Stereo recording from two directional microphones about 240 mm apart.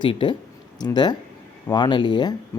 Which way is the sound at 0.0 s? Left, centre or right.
Left.